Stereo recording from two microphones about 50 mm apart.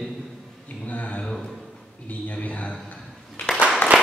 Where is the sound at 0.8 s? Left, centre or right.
Left.